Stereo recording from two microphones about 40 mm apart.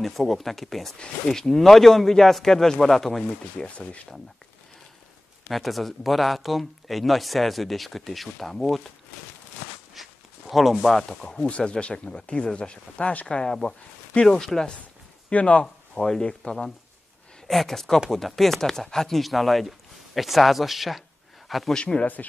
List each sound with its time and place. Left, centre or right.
0.0 s a man's voice: centre
3.5 s speech: left
5.5 s speech: centre
10.0 s walk: centre
10.5 s speech: centre
11.3 s a man's voice: left; by 14.7 s centre
15.3 s speech: left
16.0 s a man's voice: centre
17.5 s a man's voice: centre
21.7 s speech: left